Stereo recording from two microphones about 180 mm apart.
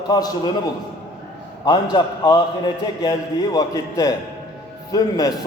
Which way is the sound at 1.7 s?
25° left (ahead or behind).